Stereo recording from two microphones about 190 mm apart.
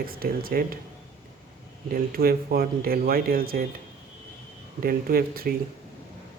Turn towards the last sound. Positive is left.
turn(degrees=-50)  # may be behind; listen again after turning